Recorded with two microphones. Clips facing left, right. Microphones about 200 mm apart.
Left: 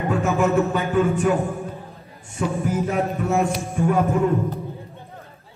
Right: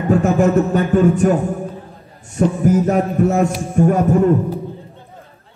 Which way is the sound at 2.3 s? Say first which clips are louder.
Right 8 dB; 45° right (ahead or behind).